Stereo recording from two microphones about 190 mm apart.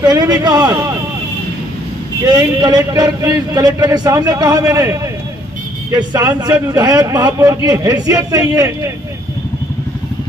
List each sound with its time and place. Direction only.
0.0 s a man's voice: 20° right (ahead or behind)
2.2 s a man's voice: 20° right (ahead or behind)